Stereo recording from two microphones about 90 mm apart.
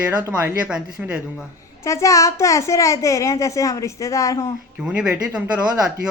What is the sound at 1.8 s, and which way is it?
A woman's voice, 35° left (ahead or behind).